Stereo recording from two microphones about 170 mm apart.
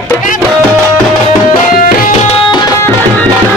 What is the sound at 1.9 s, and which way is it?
Tabla, 55° left (ahead or behind).